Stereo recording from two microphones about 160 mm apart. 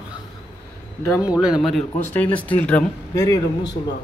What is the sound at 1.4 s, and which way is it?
Speech, 5° right (ahead or behind).